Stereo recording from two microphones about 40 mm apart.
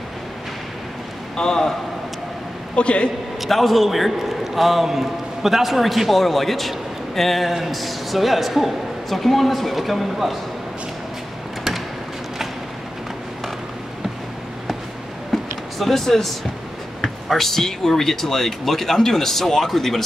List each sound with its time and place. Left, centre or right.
1.3 s a man's voice: centre
2.7 s a man's voice: left
3.3 s a man's voice: centre
15.3 s a sound: centre
17.3 s speech: centre